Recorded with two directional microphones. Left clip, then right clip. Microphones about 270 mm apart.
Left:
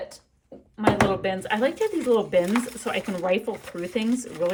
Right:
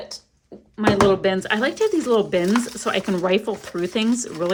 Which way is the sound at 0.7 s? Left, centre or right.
Centre.